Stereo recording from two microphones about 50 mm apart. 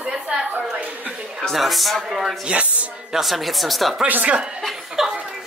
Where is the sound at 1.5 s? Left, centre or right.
Centre.